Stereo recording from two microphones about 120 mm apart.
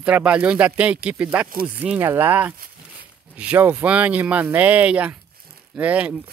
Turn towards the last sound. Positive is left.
turn(degrees=-10)  # may be behind; listen again after turning